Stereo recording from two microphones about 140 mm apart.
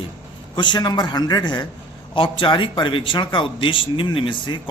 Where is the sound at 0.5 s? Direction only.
30° left (ahead or behind).